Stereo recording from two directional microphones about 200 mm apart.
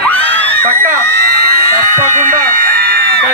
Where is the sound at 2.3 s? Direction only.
45° right (ahead or behind).